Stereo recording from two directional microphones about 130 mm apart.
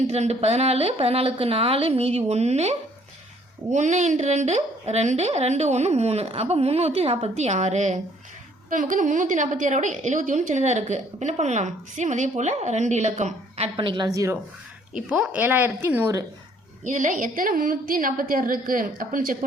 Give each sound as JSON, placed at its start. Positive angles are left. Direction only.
{"t": 0.1, "sound": "a woman's voice", "side_deg": -55}
{"t": 8.7, "sound": "a woman's voice", "side_deg": -90}
{"t": 13.7, "sound": "a woman's voice", "side_deg": -40}
{"t": 14.1, "sound": "speech", "side_deg": -25}
{"t": 14.9, "sound": "speech", "side_deg": -10}
{"t": 16.8, "sound": "a woman's voice", "side_deg": -75}